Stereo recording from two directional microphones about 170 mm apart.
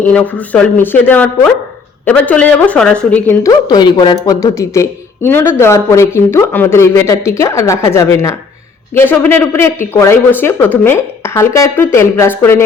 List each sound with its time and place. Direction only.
0.0 s speech: 10° left (ahead or behind)
3.4 s speech: 20° left (ahead or behind)